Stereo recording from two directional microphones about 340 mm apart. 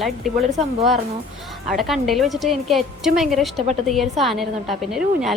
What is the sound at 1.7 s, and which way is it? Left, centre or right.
A woman's voice, centre.